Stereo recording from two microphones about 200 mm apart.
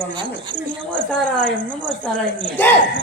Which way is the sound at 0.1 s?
25° right (ahead or behind).